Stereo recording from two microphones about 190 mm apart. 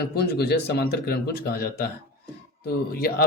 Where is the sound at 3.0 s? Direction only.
55° left (ahead or behind).